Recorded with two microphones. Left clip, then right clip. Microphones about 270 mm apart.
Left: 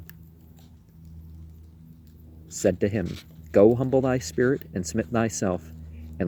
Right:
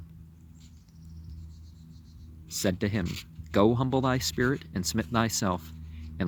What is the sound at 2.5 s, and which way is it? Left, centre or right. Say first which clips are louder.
Speech: left 6 dB; right.